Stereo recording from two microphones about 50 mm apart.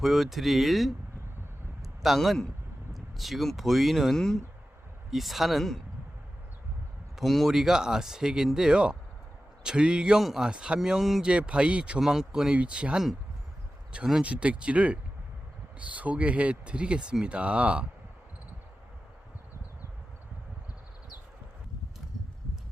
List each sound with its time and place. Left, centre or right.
0.0 s a man's voice: centre
5.1 s speech: centre
7.3 s speech: centre
7.5 s speech: centre
10.8 s speech: centre
11.2 s speech: right
11.9 s speech: centre
12.5 s speech: right
14.2 s speech: right